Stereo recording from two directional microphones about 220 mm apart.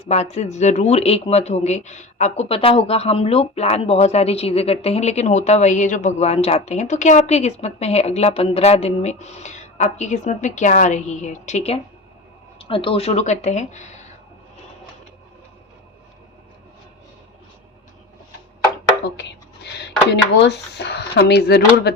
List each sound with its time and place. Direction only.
0.1 s speech: 30° left (ahead or behind)
20.3 s speech: 50° left (ahead or behind)